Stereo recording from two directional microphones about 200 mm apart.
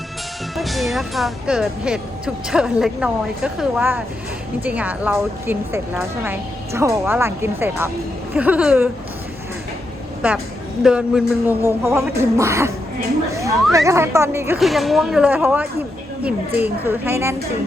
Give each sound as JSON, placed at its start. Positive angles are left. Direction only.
{"t": 0.5, "sound": "speech", "side_deg": 0}
{"t": 4.6, "sound": "music", "side_deg": -5}
{"t": 10.8, "sound": "music", "side_deg": -5}
{"t": 13.3, "sound": "speech", "side_deg": -15}
{"t": 13.7, "sound": "music", "side_deg": -15}
{"t": 14.6, "sound": "speech", "side_deg": 0}
{"t": 16.2, "sound": "music", "side_deg": -10}